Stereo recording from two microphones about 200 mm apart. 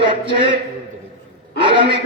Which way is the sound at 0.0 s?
25° right (ahead or behind).